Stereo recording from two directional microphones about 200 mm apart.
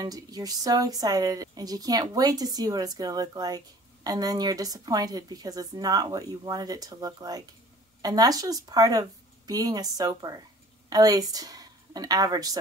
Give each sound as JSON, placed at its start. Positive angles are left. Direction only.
{"t": 0.0, "sound": "a woman's voice", "side_deg": -20}